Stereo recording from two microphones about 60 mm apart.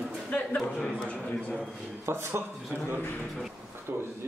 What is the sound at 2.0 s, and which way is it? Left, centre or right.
Speech, right.